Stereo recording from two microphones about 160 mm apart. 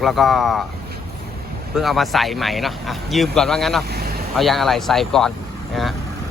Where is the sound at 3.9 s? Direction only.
75° right (ahead or behind).